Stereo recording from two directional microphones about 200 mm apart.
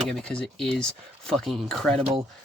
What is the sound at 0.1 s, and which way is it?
Speech, 5° left (ahead or behind).